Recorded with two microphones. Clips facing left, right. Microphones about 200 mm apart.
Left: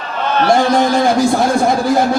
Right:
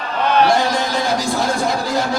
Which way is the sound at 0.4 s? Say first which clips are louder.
Left 5 dB; 50° left (ahead or behind).